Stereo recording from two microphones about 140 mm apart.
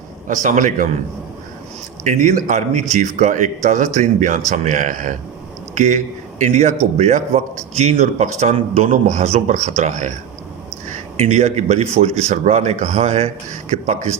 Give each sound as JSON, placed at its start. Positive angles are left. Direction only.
{"t": 0.3, "sound": "a man's voice", "side_deg": -65}
{"t": 2.0, "sound": "a man's voice", "side_deg": -65}